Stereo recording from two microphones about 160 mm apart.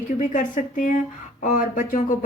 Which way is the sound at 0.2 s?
55° left (ahead or behind).